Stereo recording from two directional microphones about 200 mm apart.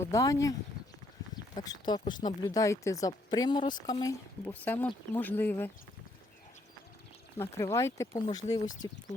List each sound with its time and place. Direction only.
0.0 s speech: 15° left (ahead or behind)
1.5 s speech: 20° left (ahead or behind)
4.0 s speech: 10° left (ahead or behind)
7.3 s speech: 10° left (ahead or behind)